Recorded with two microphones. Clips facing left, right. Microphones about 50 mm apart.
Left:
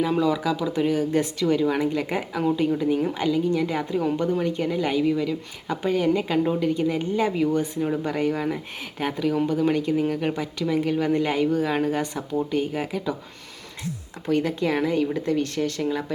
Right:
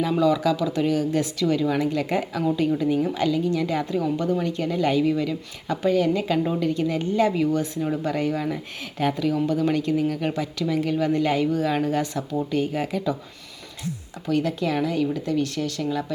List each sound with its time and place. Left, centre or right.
0.0 s a woman's voice: centre
4.0 s a woman's voice: left
4.4 s a woman's voice: centre
5.6 s a woman's voice: left
14.3 s a woman's voice: left